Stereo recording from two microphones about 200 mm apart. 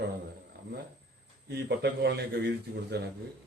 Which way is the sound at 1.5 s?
55° right (ahead or behind).